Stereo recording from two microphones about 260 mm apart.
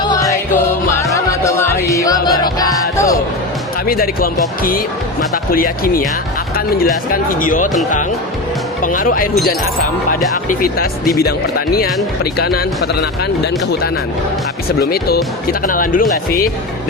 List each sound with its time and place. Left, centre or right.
0.0 s music: centre
3.8 s speech: left
8.8 s speech: left
14.8 s speech: left